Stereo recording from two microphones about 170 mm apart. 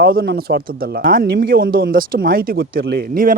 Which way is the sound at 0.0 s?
60° right (ahead or behind).